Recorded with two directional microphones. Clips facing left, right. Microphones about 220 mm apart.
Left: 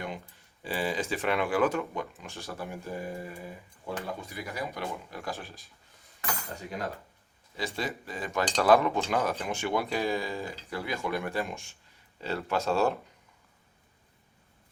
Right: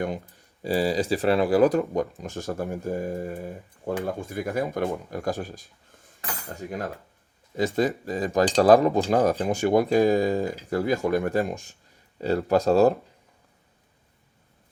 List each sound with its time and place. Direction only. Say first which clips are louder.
0.0 s speech: right 9 dB; 40° right (ahead or behind)